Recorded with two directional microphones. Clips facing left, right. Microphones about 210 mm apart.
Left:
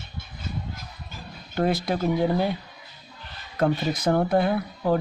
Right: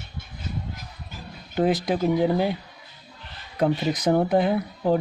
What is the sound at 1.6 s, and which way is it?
Speech, 15° right (ahead or behind).